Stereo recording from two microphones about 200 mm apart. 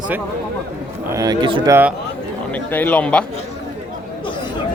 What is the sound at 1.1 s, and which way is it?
Speech, 20° right (ahead or behind).